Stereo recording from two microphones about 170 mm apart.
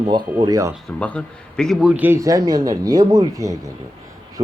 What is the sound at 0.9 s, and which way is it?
Speech, 5° left (ahead or behind).